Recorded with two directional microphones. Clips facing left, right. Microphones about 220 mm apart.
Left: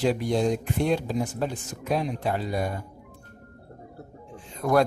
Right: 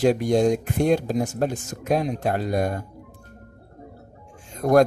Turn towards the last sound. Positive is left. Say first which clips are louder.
# right 5 dB
turn(degrees=-45)  # may be behind; listen again after turning